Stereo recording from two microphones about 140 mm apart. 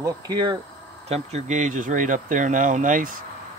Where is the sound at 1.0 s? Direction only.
50° right (ahead or behind).